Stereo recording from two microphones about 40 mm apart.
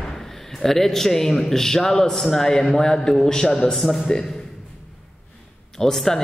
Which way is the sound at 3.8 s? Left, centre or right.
Centre.